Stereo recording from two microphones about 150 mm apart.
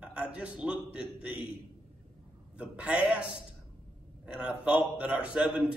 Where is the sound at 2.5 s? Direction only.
10° right (ahead or behind).